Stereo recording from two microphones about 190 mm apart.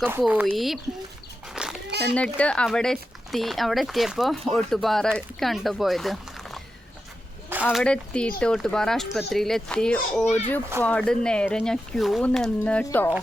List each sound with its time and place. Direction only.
0.0 s speech: 10° right (ahead or behind)
1.5 s a sound: 5° right (ahead or behind)
2.1 s speech: 5° left (ahead or behind)
10.2 s speech: 35° left (ahead or behind)
10.8 s speech: 5° left (ahead or behind)